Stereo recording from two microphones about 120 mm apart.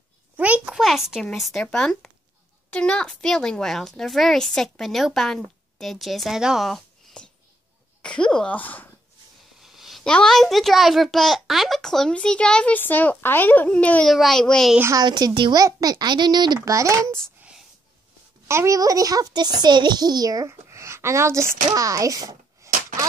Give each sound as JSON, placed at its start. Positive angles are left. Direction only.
{"t": 0.4, "sound": "a sound", "side_deg": -10}
{"t": 1.2, "sound": "speech", "side_deg": 0}
{"t": 9.6, "sound": "speech", "side_deg": -5}
{"t": 14.8, "sound": "a child's voice", "side_deg": -25}
{"t": 15.0, "sound": "a child's voice", "side_deg": -35}
{"t": 16.5, "sound": "a child's voice", "side_deg": -25}
{"t": 17.4, "sound": "wail", "side_deg": -10}
{"t": 18.5, "sound": "a child's voice", "side_deg": -25}